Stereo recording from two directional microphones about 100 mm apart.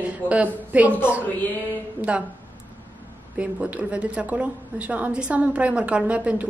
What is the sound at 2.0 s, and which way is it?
Speech, 10° right (ahead or behind).